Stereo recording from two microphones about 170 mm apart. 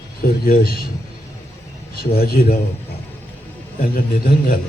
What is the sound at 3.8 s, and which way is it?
Speech, 55° left (ahead or behind).